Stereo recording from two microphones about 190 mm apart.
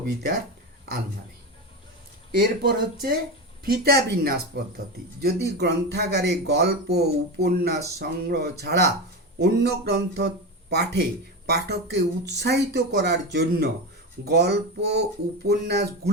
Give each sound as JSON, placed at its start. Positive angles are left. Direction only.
{"t": 2.3, "sound": "speech", "side_deg": -55}